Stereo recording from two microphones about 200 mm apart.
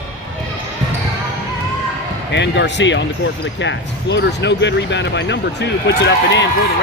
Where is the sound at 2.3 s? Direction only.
60° left (ahead or behind).